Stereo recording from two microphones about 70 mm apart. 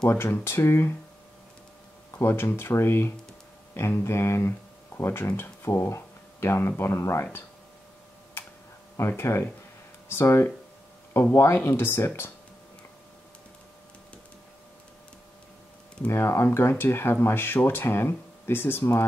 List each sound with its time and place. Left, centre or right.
0.1 s speech: left
2.1 s speech: left
8.9 s speech: left
16.1 s speech: left